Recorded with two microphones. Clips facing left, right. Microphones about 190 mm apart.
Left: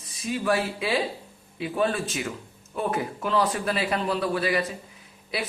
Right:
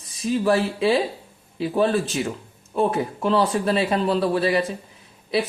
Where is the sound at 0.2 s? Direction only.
30° right (ahead or behind).